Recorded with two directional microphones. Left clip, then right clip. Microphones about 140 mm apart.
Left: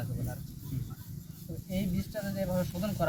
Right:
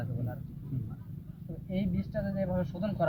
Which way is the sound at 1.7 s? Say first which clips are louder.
Right 1 dB; 20° left (ahead or behind).